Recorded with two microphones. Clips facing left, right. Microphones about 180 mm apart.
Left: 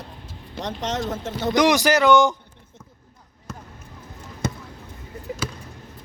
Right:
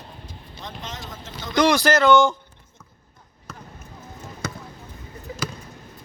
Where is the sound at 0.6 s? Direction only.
75° left (ahead or behind).